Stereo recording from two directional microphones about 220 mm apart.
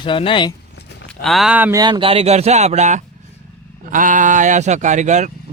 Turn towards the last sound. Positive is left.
turn(degrees=-35)  # may be behind; listen again after turning